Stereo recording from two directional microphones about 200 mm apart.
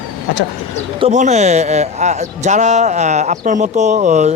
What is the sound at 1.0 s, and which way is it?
Speech, 35° right (ahead or behind).